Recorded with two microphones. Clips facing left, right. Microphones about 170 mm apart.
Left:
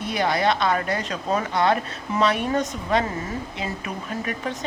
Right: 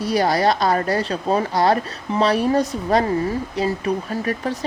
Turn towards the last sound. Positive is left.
turn(degrees=-35)  # may be behind; listen again after turning